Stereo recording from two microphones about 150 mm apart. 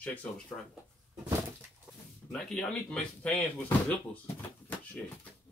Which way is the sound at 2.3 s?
5° left (ahead or behind).